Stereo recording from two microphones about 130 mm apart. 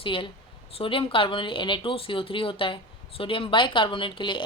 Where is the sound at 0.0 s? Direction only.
40° left (ahead or behind).